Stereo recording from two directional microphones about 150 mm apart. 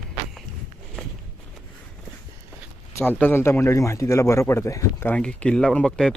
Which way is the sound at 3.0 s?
10° left (ahead or behind).